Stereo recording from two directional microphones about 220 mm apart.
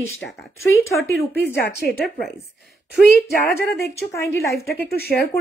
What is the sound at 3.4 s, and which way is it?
Speech, 45° left (ahead or behind).